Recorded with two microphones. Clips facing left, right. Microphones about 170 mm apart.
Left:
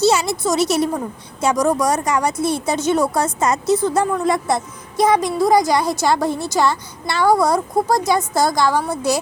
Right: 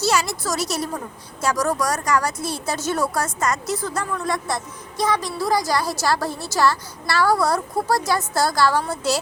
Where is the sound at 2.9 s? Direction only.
20° left (ahead or behind).